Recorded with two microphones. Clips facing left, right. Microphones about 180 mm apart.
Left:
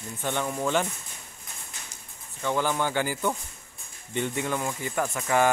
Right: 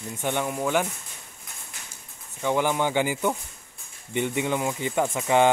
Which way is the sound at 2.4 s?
15° right (ahead or behind).